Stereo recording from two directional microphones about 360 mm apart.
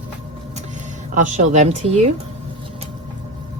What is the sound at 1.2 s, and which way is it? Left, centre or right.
Speech, right.